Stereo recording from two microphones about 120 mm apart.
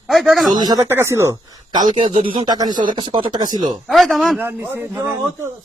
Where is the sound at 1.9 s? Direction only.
45° right (ahead or behind).